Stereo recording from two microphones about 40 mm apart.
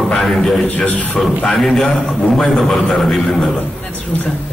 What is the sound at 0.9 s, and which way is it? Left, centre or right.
Speech, left.